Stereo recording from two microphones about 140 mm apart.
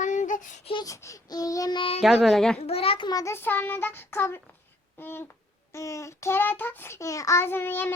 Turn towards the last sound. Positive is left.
turn(degrees=15)  # may be behind; listen again after turning